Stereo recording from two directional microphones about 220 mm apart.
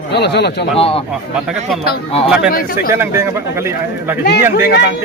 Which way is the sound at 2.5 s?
40° left (ahead or behind).